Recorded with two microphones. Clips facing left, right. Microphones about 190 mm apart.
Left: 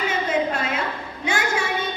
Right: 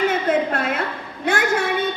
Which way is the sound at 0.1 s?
55° right (ahead or behind).